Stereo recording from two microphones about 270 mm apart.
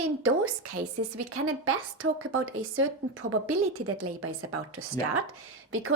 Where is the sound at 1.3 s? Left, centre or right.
Right.